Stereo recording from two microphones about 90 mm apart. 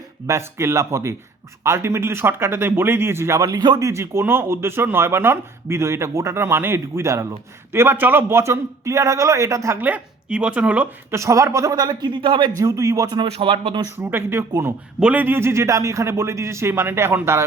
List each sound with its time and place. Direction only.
0.3 s a man's voice: 30° right (ahead or behind); by 3.8 s 45° right (ahead or behind)
3.8 s a man's voice: 35° right (ahead or behind)
9.8 s speech: 15° right (ahead or behind)
11.1 s a man's voice: 35° right (ahead or behind)
11.7 s a man's voice: 50° right (ahead or behind); by 12.5 s 65° right (ahead or behind)
12.5 s a man's voice: 40° right (ahead or behind)
13.2 s speech: 80° right
14.1 s a man's voice: 25° right (ahead or behind)